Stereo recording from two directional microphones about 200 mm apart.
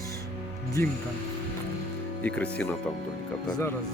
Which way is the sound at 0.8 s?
10° left (ahead or behind).